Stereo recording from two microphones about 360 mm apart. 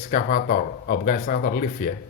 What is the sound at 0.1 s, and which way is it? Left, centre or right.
Speech, left.